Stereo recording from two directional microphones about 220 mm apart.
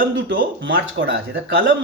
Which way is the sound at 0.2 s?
55° right (ahead or behind).